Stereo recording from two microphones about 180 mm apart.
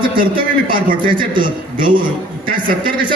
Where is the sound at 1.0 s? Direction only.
25° right (ahead or behind).